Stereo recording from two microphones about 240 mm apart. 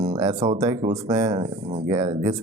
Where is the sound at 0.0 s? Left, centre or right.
Right.